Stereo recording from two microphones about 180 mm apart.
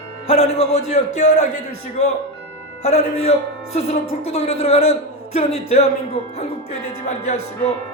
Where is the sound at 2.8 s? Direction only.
40° left (ahead or behind).